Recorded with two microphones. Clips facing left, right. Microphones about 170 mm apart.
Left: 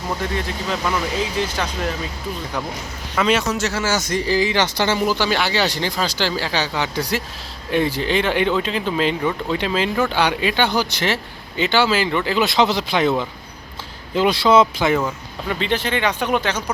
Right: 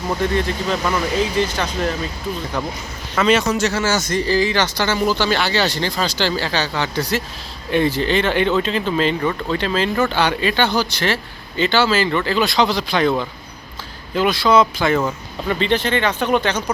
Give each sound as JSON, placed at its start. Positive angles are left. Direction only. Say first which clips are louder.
{"t": 0.2, "sound": "speech", "louder": "right 5 dB", "side_deg": 5}
{"t": 3.2, "sound": "speech", "louder": "right 3 dB", "side_deg": 5}
{"t": 15.0, "sound": "speech", "louder": "right 3 dB", "side_deg": 5}